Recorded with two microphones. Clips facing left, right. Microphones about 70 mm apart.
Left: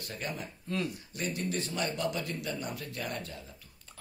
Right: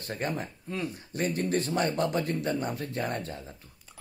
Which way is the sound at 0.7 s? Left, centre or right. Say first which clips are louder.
Left 2 dB; centre.